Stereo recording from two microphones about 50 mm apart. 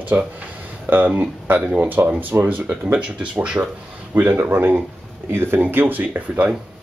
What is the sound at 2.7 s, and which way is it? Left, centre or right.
Speech, right.